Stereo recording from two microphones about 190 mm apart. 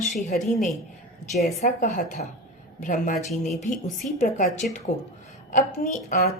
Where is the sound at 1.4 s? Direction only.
45° left (ahead or behind).